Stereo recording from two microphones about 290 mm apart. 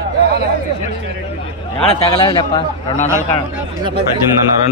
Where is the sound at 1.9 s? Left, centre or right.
Centre.